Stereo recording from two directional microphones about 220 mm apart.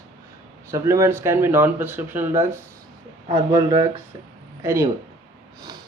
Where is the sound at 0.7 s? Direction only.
15° right (ahead or behind).